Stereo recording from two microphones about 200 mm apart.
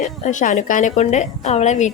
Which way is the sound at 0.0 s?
40° left (ahead or behind).